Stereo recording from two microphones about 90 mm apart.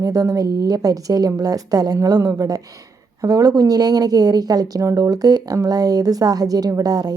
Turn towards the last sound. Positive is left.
turn(degrees=-45)  # may be behind; listen again after turning